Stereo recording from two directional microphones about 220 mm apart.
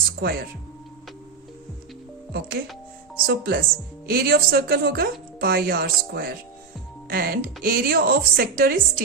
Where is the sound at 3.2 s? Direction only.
45° right (ahead or behind).